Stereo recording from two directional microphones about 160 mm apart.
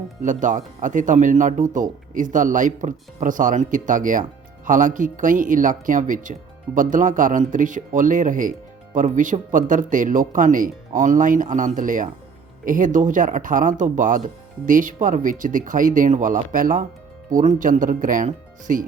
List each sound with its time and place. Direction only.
0.2 s speech: 55° right (ahead or behind)